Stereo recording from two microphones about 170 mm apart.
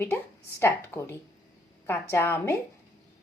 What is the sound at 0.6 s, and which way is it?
A woman's voice, 15° left (ahead or behind).